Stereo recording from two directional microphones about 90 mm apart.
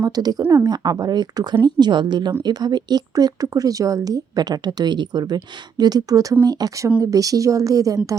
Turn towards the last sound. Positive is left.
turn(degrees=-40)  # may be behind; listen again after turning